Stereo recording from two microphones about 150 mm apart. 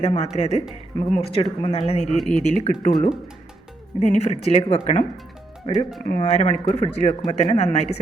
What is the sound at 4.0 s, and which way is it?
Speech, 45° left (ahead or behind).